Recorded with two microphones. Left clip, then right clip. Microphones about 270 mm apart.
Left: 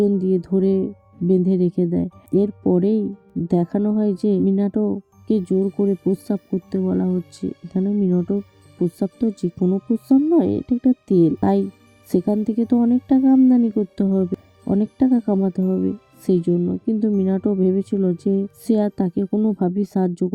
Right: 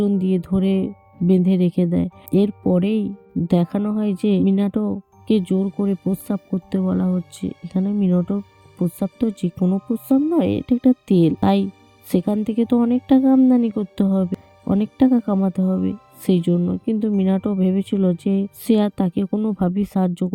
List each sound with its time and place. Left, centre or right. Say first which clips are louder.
0.0 s speech: left 3 dB; right